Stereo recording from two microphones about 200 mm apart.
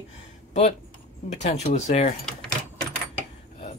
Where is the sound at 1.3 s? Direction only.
35° left (ahead or behind).